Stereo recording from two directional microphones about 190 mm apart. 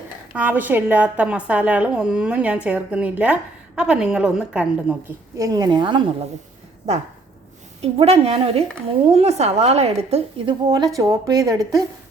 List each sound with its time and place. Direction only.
0.3 s a woman's voice: 10° right (ahead or behind)
5.4 s a woman's voice: 20° right (ahead or behind)
7.8 s a woman's voice: 35° right (ahead or behind)
10.7 s a woman's voice: 20° right (ahead or behind)